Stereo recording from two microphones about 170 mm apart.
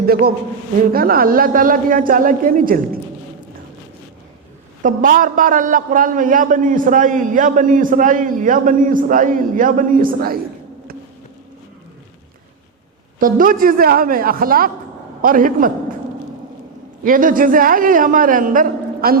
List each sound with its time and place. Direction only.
0.0 s a woman's voice: 60° right (ahead or behind)
4.8 s a man's voice: 50° right (ahead or behind)
13.1 s a woman's voice: 55° right (ahead or behind)
17.0 s a man's voice: 55° right (ahead or behind)